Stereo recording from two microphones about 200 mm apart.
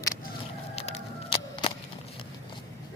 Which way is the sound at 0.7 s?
30° left (ahead or behind).